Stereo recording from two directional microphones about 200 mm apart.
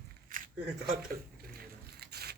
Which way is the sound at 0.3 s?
40° right (ahead or behind).